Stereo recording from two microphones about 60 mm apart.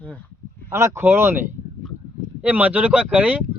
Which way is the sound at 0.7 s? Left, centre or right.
Right.